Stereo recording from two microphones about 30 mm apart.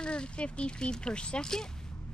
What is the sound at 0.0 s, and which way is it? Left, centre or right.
Speech, left.